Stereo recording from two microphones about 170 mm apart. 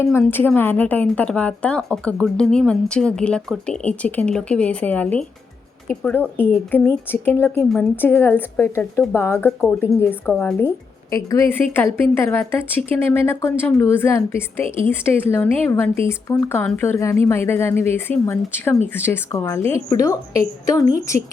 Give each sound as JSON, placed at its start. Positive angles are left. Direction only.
{"t": 0.3, "sound": "a woman's voice", "side_deg": 10}